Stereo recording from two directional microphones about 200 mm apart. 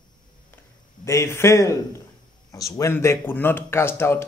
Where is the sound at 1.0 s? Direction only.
15° left (ahead or behind).